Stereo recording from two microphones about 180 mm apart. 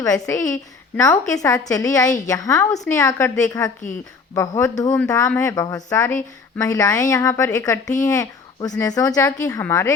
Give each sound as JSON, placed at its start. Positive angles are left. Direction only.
{"t": 0.0, "sound": "a woman's voice", "side_deg": 20}